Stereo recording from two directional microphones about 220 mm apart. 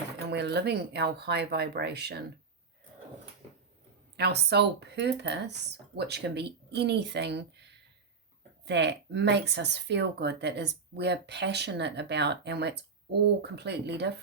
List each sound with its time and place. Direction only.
0.3 s speech: 50° right (ahead or behind)
4.2 s speech: 50° right (ahead or behind)
8.6 s speech: 50° right (ahead or behind)